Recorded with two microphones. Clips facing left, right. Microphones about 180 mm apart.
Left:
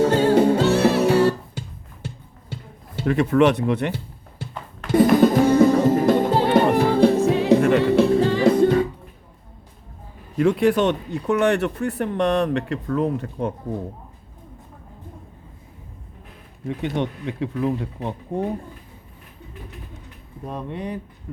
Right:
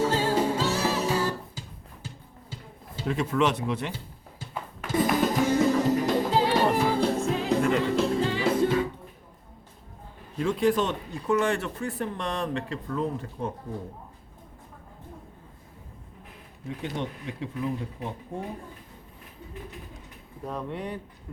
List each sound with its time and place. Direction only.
0.0 s music: 65° left (ahead or behind)
10.3 s speech: 70° left (ahead or behind)
16.6 s speech: 65° left (ahead or behind)
20.4 s speech: 20° left (ahead or behind)